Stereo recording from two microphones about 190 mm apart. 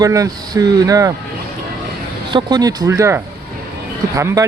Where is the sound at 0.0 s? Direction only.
20° right (ahead or behind).